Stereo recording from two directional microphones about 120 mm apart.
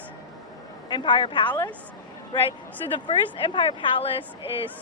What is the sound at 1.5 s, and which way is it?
Speech, 20° left (ahead or behind).